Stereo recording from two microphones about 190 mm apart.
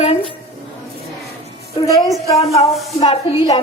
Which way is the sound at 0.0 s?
30° left (ahead or behind).